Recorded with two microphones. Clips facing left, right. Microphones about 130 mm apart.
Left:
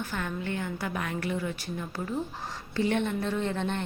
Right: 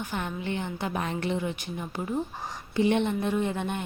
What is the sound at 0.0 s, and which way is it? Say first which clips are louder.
A woman's voice: right 1 dB; 15° right (ahead or behind).